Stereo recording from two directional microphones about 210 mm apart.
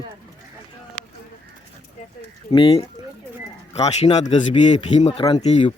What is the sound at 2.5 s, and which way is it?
A man's voice, 25° left (ahead or behind).